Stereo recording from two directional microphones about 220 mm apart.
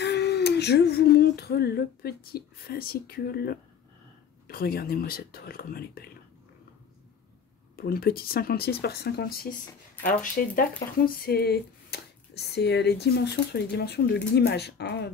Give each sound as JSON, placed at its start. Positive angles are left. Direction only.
{"t": 0.0, "sound": "speech", "side_deg": 50}
{"t": 7.7, "sound": "speech", "side_deg": 45}